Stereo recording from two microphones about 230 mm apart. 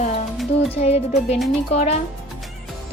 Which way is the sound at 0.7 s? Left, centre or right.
Left.